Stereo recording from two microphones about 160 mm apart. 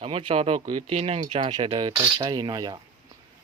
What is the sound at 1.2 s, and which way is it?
Speech, 30° right (ahead or behind).